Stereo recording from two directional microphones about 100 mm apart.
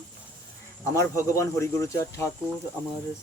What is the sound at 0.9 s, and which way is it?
Speech, 30° left (ahead or behind).